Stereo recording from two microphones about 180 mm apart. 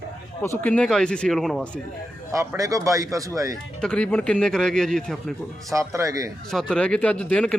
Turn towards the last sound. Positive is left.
turn(degrees=5)  # may be behind; listen again after turning